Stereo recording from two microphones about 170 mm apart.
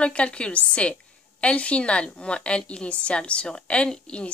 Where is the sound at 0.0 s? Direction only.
5° left (ahead or behind).